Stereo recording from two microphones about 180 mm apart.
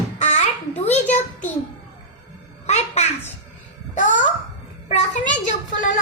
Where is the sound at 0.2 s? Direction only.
40° left (ahead or behind).